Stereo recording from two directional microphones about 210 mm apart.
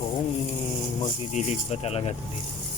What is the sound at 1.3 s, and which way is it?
Speech, 30° left (ahead or behind).